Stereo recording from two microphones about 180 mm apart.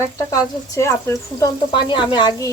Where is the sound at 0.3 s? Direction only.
15° left (ahead or behind).